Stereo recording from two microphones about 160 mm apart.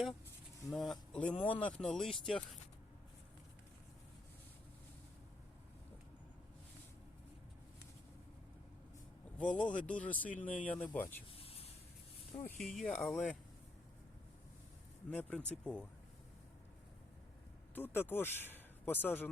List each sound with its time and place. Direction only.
0.7 s speech: centre (ahead or behind)
9.4 s speech: 5° left (ahead or behind)
11.3 s a sound: 35° left (ahead or behind)
12.5 s speech: 5° left (ahead or behind)
15.1 s speech: 10° left (ahead or behind)
17.7 s speech: 15° left (ahead or behind)